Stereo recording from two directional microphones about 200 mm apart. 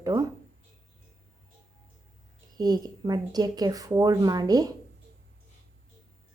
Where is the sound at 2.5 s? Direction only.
20° right (ahead or behind).